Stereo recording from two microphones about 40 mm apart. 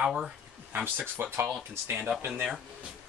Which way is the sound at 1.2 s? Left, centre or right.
Right.